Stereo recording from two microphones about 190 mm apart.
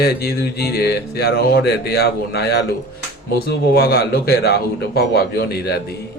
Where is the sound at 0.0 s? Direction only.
55° left (ahead or behind).